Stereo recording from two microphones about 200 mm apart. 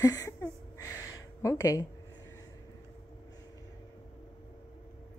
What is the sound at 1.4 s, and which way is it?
Speech, 15° left (ahead or behind).